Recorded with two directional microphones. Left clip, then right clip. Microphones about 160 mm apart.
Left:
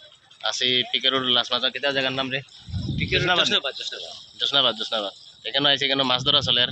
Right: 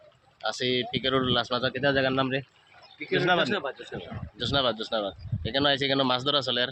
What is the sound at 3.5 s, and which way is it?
Speech, 50° right (ahead or behind).